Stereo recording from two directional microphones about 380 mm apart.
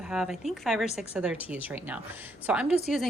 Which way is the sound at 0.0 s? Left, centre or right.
Centre.